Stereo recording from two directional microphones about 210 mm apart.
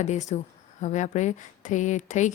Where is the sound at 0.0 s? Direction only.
35° left (ahead or behind).